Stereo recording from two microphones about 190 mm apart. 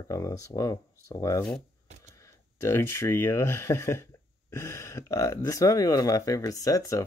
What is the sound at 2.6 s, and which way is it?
Speech, 15° left (ahead or behind).